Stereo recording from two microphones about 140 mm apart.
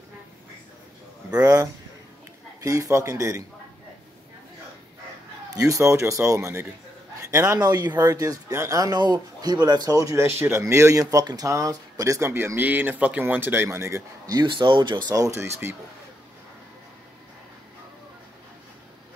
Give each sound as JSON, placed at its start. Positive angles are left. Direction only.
{"t": 1.4, "sound": "speech", "side_deg": -20}
{"t": 5.5, "sound": "speech", "side_deg": -25}
{"t": 7.2, "sound": "a sound", "side_deg": -25}
{"t": 7.6, "sound": "speech", "side_deg": -30}